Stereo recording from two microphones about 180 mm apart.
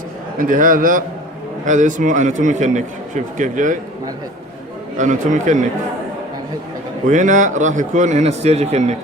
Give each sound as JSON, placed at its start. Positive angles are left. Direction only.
{"t": 0.3, "sound": "a man's voice", "side_deg": -50}
{"t": 4.9, "sound": "a man's voice", "side_deg": -45}
{"t": 7.1, "sound": "a man's voice", "side_deg": -45}